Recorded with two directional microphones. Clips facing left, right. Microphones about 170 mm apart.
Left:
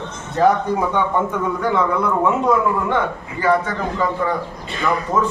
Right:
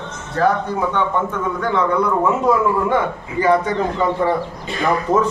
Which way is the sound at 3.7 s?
25° right (ahead or behind).